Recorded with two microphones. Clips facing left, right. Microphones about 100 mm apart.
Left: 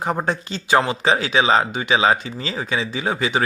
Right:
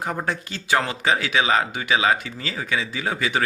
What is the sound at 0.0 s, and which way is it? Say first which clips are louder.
Speech: left 4 dB; 25° left (ahead or behind).